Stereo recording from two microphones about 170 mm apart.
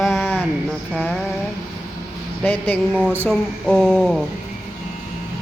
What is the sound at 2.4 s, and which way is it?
Speech, 10° left (ahead or behind).